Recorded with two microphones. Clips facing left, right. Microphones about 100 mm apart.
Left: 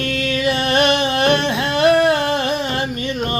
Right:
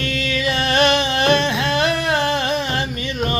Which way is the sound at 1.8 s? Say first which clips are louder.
Left 9 dB; 50° left (ahead or behind).